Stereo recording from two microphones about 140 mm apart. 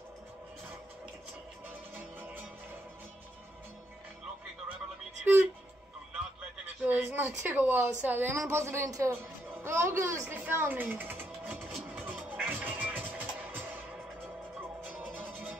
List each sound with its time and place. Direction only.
2.1 s music: 15° right (ahead or behind)
6.8 s speech: 10° right (ahead or behind)
11.7 s music: centre (ahead or behind)
12.3 s music: 10° right (ahead or behind)